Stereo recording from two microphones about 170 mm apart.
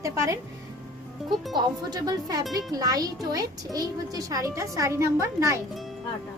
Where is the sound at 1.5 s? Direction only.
25° right (ahead or behind).